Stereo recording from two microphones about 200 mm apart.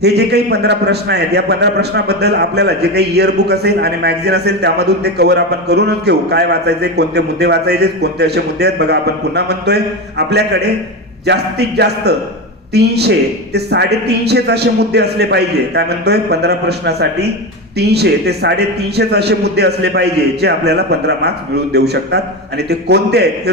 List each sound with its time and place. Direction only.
0.0 s a man's voice: 55° right (ahead or behind)